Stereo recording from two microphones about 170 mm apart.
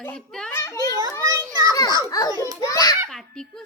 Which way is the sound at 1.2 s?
20° right (ahead or behind).